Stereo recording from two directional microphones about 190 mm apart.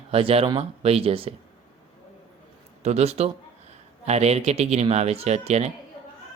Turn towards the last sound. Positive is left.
turn(degrees=-35)  # may be behind; listen again after turning